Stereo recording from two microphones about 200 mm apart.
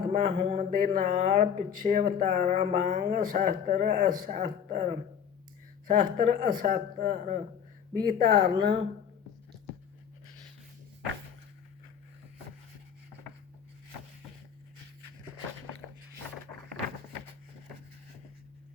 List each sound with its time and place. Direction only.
0.1 s a man's voice: 40° right (ahead or behind)